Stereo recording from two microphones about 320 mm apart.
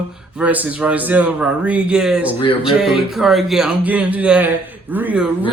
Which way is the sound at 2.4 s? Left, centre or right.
Centre.